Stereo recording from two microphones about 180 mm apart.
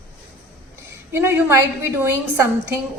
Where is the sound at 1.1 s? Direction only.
10° right (ahead or behind).